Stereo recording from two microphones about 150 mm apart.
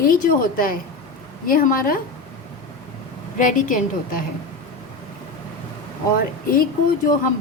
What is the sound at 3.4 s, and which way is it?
Speech, 60° left (ahead or behind).